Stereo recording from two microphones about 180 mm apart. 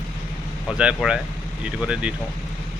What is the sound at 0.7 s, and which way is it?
Speech, 5° right (ahead or behind).